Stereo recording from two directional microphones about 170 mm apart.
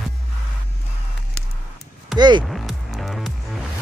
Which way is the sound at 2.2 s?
25° right (ahead or behind).